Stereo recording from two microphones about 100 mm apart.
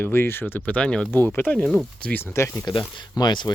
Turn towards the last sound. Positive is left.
turn(degrees=45)  # may be behind; listen again after turning